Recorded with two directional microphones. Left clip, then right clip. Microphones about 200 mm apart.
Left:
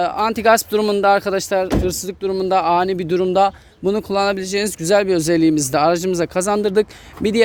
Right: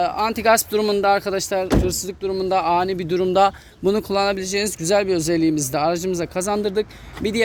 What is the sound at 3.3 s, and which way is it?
Speech, 20° left (ahead or behind).